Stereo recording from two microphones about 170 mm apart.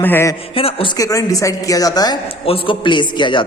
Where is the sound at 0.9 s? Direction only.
20° left (ahead or behind).